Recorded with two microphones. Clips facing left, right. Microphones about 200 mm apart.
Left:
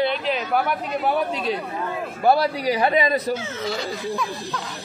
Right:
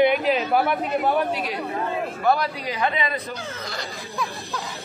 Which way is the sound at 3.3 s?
5° left (ahead or behind).